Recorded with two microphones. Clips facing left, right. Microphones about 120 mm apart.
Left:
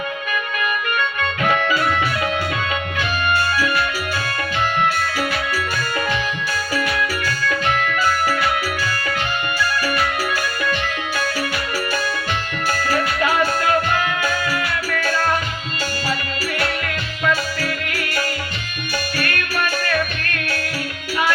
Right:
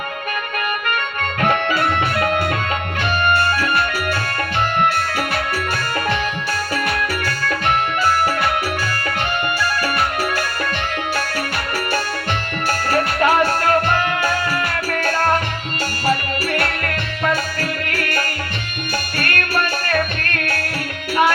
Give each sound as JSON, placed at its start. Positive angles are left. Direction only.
{"t": 1.2, "sound": "music", "side_deg": -50}
{"t": 6.7, "sound": "music", "side_deg": -55}
{"t": 9.6, "sound": "music", "side_deg": -55}
{"t": 12.7, "sound": "music", "side_deg": -55}